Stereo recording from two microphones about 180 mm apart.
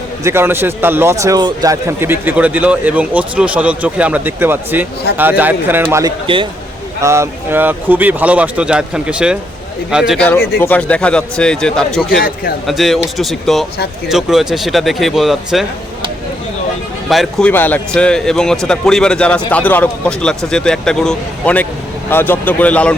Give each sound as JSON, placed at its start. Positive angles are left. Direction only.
{"t": 0.3, "sound": "a man's voice", "side_deg": -10}
{"t": 6.2, "sound": "a man's voice", "side_deg": -30}
{"t": 7.0, "sound": "a man's voice", "side_deg": -15}
{"t": 10.6, "sound": "a man's voice", "side_deg": 10}
{"t": 17.1, "sound": "a man's voice", "side_deg": 0}